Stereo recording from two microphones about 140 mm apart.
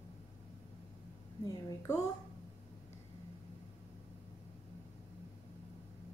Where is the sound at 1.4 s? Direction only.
25° left (ahead or behind).